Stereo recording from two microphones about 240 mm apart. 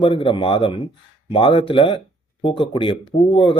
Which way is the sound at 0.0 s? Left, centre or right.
Left.